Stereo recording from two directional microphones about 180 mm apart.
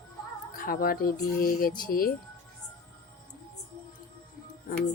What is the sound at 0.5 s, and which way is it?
Speech, 55° left (ahead or behind).